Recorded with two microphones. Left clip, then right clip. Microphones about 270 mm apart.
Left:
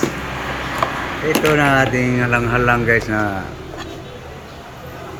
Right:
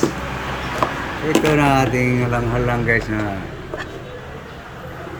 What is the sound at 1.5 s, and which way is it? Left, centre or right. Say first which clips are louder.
Speech: left 2 dB; centre.